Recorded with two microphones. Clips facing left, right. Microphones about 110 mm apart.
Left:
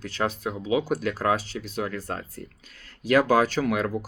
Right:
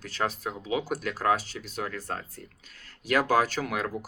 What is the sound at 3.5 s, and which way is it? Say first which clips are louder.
Speech: left 6 dB; 45° left (ahead or behind).